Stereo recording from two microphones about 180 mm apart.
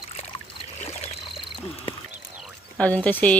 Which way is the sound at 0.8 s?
35° left (ahead or behind).